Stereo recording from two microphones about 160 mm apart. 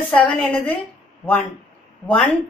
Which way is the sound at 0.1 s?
10° left (ahead or behind).